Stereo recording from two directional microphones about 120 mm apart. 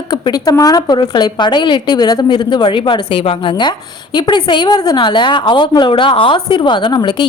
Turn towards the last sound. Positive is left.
turn(degrees=40)  # may be behind; listen again after turning